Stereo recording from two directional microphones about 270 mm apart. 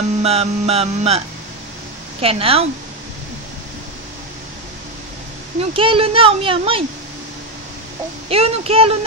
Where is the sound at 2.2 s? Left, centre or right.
Right.